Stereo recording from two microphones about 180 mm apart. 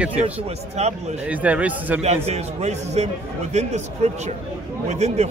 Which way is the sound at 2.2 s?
40° right (ahead or behind).